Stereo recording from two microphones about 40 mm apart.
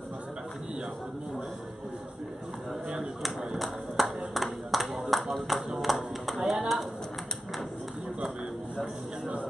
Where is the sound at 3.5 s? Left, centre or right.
Centre.